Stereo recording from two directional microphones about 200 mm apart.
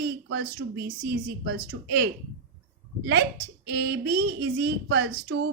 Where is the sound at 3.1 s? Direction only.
55° right (ahead or behind).